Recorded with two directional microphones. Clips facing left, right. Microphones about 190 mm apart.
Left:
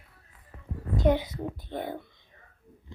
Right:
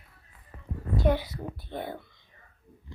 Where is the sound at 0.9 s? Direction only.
20° left (ahead or behind).